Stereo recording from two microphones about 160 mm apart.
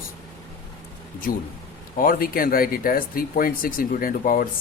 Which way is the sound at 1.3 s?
60° left (ahead or behind).